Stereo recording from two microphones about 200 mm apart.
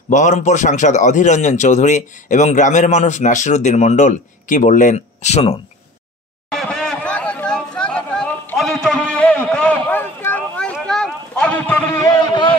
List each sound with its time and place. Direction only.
0.1 s a man's voice: 35° left (ahead or behind)
6.5 s chatter: 5° left (ahead or behind)
12.2 s a sound: 20° left (ahead or behind)